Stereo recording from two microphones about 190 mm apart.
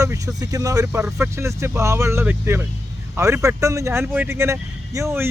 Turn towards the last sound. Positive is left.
turn(degrees=-15)  # may be behind; listen again after turning